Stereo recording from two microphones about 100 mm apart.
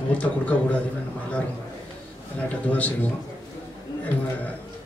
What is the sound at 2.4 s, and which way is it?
Speech, 15° left (ahead or behind).